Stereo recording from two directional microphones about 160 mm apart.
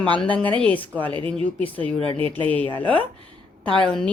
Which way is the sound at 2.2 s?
35° right (ahead or behind).